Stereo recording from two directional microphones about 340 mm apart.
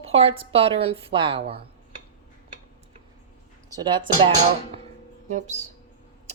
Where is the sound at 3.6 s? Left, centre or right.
Centre.